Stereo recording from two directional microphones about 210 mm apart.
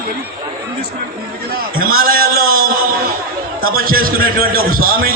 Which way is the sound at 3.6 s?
45° right (ahead or behind).